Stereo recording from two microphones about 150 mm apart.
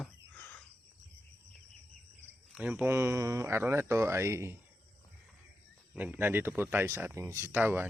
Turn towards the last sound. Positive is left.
turn(degrees=-10)  # may be behind; listen again after turning